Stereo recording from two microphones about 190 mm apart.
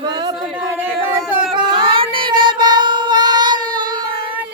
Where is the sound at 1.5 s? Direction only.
25° right (ahead or behind).